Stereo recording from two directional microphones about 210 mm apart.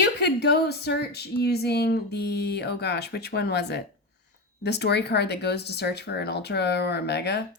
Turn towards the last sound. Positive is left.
turn(degrees=50)  # may be behind; listen again after turning